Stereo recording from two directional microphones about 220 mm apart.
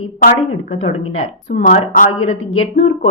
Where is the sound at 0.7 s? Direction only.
30° left (ahead or behind).